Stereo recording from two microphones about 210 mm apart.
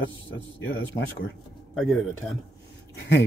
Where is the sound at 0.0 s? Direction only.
60° left (ahead or behind).